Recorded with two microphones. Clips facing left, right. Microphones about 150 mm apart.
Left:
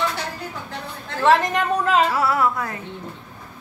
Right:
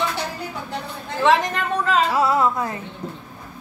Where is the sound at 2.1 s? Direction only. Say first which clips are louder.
Right 2 dB; 20° right (ahead or behind).